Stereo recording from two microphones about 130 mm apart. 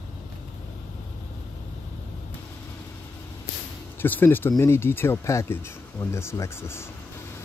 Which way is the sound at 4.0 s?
15° left (ahead or behind).